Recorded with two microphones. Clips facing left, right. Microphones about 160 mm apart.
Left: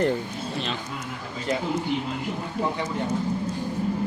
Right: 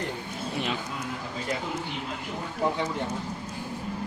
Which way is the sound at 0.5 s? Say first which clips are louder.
Right 1 dB; 10° right (ahead or behind).